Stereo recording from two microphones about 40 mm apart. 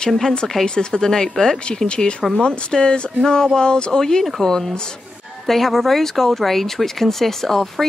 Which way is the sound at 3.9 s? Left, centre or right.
Centre.